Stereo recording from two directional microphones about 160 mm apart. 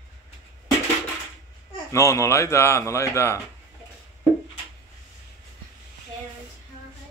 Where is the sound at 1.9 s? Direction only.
20° left (ahead or behind).